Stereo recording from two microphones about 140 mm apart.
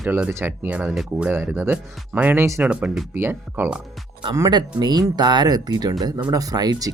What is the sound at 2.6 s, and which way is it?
Speech, 5° right (ahead or behind).